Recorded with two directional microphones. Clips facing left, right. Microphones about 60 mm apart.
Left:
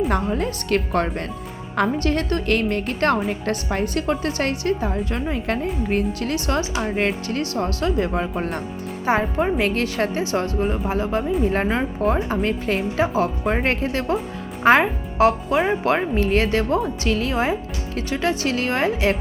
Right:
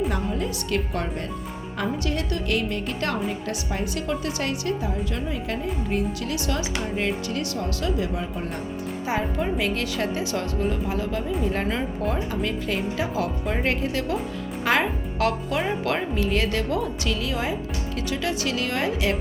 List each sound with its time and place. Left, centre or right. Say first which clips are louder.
0.1 s speech: left 5 dB; left
9.0 s speech: left 6 dB; left